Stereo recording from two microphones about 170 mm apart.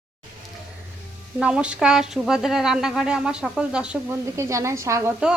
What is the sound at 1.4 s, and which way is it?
A woman's voice, 5° right (ahead or behind).